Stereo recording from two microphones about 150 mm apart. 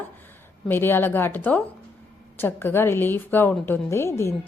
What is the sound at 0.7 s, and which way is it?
A woman's voice, 15° left (ahead or behind).